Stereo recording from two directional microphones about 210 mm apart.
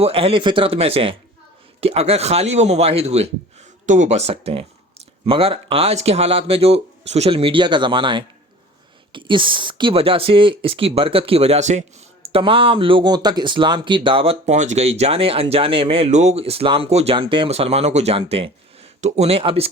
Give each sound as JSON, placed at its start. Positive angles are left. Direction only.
{"t": 0.0, "sound": "a man's voice", "side_deg": -25}